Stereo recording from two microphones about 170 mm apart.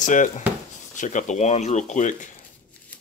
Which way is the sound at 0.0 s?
50° left (ahead or behind).